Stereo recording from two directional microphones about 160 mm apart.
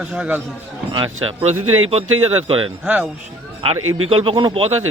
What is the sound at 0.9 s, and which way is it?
Speech, 35° right (ahead or behind).